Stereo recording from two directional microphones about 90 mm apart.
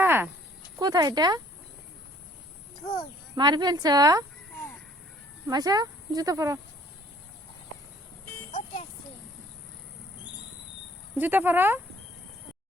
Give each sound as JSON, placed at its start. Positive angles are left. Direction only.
{"t": 0.0, "sound": "snake", "side_deg": -25}
{"t": 0.8, "sound": "speech", "side_deg": -50}
{"t": 2.8, "sound": "a child's voice", "side_deg": 65}
{"t": 3.3, "sound": "speech", "side_deg": -55}
{"t": 5.5, "sound": "speech", "side_deg": -45}
{"t": 11.2, "sound": "speech", "side_deg": -20}